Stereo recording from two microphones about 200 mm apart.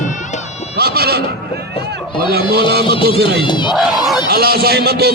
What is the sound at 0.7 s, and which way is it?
Neigh, 50° right (ahead or behind).